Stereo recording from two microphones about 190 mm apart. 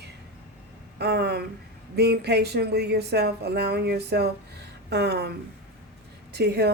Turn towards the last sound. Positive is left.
turn(degrees=-60)  # may be behind; listen again after turning